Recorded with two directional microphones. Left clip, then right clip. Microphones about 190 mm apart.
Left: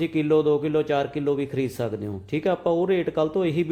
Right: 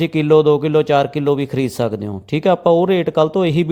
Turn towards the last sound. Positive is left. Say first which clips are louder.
# right 8 dB
turn(degrees=-35)  # may be behind; listen again after turning